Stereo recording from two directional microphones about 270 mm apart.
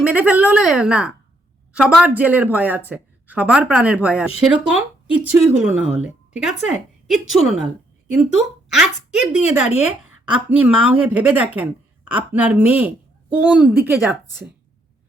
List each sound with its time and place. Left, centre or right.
0.0 s speech: centre